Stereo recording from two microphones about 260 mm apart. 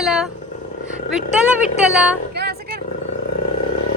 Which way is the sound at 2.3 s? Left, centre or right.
Right.